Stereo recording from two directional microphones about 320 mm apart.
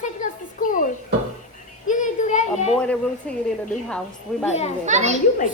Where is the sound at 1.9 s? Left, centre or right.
Left.